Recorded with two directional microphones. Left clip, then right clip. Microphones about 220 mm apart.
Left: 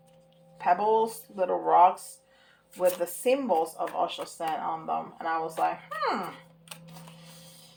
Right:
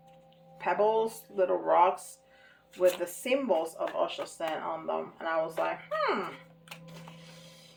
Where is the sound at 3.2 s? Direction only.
40° left (ahead or behind).